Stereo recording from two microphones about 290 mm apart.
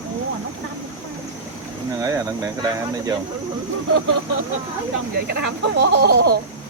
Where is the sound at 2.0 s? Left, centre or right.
Centre.